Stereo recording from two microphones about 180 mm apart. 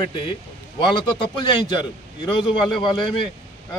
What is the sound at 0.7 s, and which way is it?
A man's voice, 25° left (ahead or behind).